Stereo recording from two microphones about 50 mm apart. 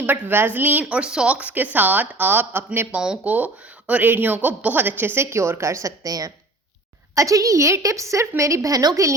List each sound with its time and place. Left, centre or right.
0.0 s a woman's voice: right
0.9 s a woman's voice: centre; by 2.6 s right
2.9 s a woman's voice: right
7.2 s a woman's voice: right